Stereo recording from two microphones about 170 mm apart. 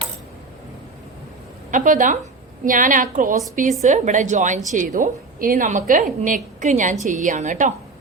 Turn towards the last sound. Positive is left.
turn(degrees=-45)  # may be behind; listen again after turning